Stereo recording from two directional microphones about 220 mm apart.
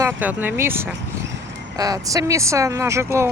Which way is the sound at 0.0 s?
10° right (ahead or behind).